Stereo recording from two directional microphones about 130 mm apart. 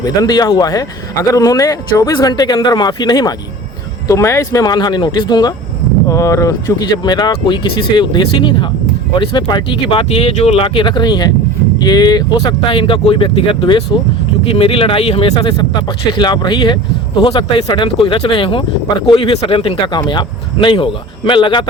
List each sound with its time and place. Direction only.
0.0 s speech: 30° left (ahead or behind)